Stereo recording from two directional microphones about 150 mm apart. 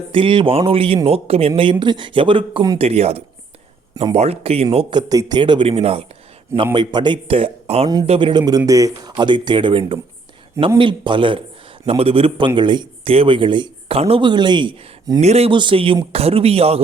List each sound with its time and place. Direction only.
0.1 s speech: 35° right (ahead or behind)
6.7 s speech: 30° right (ahead or behind)
15.2 s speech: 45° right (ahead or behind)